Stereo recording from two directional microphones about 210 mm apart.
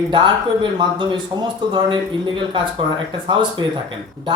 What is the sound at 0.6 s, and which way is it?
A man's voice, 20° right (ahead or behind).